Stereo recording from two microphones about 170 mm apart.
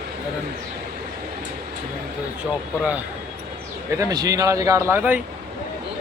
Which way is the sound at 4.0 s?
20° right (ahead or behind).